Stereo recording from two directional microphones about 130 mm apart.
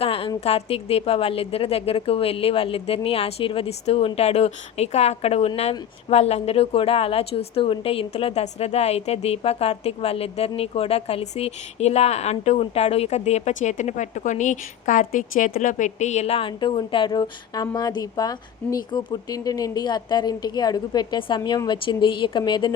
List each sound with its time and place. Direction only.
0.0 s a woman's voice: 45° left (ahead or behind)